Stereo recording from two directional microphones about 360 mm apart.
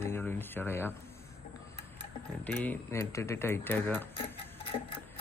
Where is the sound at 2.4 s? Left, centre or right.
Centre.